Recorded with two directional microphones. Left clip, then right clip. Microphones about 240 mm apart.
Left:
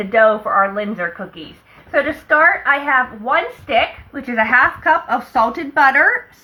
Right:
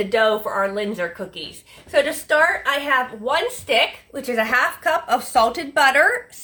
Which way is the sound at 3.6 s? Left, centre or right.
Right.